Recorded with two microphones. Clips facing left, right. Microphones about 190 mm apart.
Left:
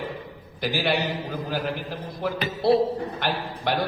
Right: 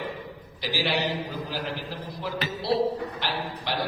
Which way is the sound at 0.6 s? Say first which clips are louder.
Left 3 dB; 50° left (ahead or behind).